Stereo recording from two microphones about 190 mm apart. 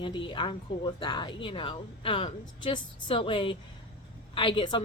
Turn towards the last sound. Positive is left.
turn(degrees=25)  # may be behind; listen again after turning